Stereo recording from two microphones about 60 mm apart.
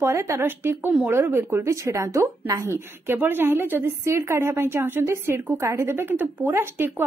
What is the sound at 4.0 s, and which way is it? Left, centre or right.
A woman's voice, right.